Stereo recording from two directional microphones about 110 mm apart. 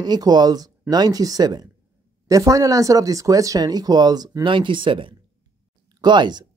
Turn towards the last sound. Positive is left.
turn(degrees=-40)  # may be behind; listen again after turning